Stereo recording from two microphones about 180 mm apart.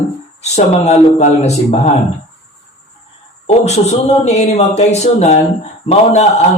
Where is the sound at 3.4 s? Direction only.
35° left (ahead or behind).